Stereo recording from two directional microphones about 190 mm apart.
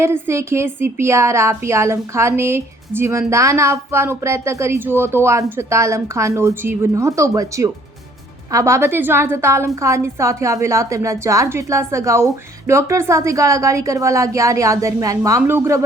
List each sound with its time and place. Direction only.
0.0 s speech: 15° right (ahead or behind)